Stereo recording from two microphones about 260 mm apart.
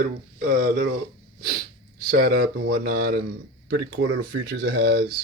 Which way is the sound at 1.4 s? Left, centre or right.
Right.